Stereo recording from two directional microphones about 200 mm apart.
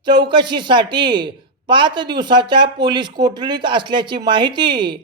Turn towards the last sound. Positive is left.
turn(degrees=-25)  # may be behind; listen again after turning